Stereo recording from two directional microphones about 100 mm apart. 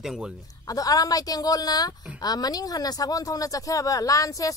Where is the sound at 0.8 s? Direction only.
40° left (ahead or behind).